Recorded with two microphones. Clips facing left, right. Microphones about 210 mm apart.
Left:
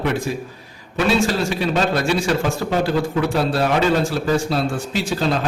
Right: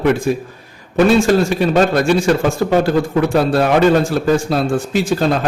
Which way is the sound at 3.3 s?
50° right (ahead or behind).